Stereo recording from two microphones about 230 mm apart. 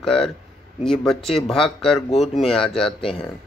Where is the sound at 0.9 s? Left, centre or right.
Centre.